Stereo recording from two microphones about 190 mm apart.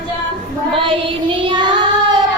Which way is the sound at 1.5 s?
25° right (ahead or behind).